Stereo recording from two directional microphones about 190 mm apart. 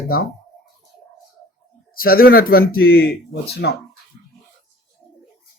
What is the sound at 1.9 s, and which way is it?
Speech, 50° left (ahead or behind).